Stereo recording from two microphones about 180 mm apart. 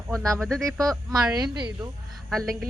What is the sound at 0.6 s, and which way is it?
A man's voice, 20° right (ahead or behind).